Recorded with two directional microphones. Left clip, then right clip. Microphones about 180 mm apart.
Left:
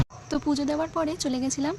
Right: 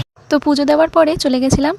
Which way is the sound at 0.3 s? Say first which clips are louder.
Right 14 dB; 45° right (ahead or behind).